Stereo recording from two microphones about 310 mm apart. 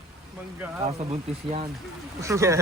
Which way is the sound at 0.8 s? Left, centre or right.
Centre.